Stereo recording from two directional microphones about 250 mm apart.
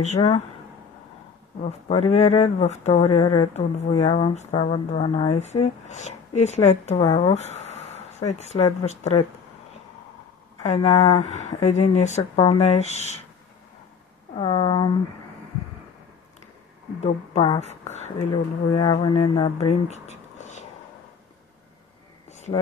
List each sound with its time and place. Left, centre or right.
0.0 s speech: left
1.6 s speech: left
10.6 s speech: left
14.3 s speech: left
17.0 s speech: left